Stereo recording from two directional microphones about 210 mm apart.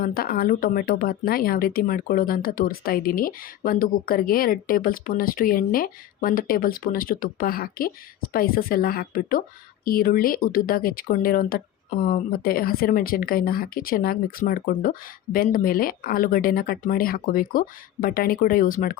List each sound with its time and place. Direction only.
0.0 s speech: 45° left (ahead or behind)